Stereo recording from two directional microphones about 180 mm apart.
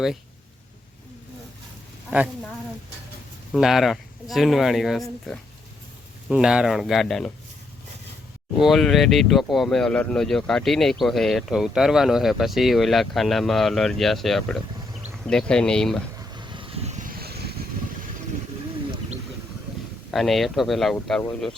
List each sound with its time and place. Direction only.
2.0 s speech: 5° right (ahead or behind)
3.5 s speech: centre (ahead or behind)
6.2 s speech: 5° right (ahead or behind)
8.5 s speech: centre (ahead or behind)
16.3 s vehicle: 25° right (ahead or behind); by 17.5 s 60° right (ahead or behind)
20.1 s speech: centre (ahead or behind)